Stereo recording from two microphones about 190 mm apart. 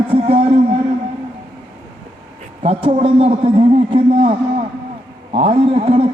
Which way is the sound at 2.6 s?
30° right (ahead or behind).